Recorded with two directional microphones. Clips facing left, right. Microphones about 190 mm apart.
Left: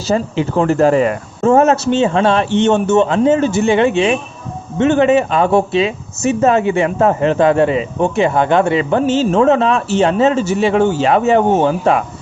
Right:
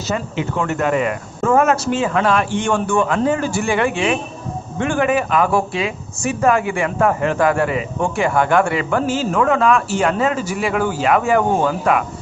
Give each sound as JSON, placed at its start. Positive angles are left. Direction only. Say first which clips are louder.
{"t": 0.1, "sound": "speech", "louder": "left 7 dB", "side_deg": 30}